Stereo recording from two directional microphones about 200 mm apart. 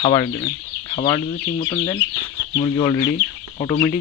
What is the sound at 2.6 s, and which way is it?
Speech, 25° left (ahead or behind).